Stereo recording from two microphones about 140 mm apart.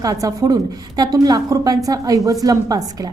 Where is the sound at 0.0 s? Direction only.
25° right (ahead or behind).